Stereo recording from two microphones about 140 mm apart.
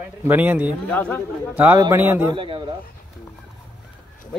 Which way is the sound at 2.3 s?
40° right (ahead or behind).